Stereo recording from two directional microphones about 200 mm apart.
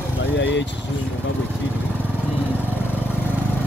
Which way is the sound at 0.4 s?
60° left (ahead or behind).